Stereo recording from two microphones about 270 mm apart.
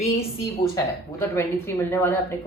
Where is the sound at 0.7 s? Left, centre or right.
Centre.